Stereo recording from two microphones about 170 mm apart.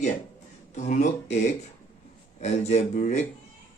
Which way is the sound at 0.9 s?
45° left (ahead or behind).